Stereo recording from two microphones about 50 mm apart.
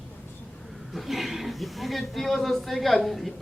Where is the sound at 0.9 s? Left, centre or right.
Centre.